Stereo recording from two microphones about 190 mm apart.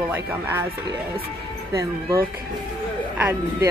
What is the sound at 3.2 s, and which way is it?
Speech, 15° right (ahead or behind).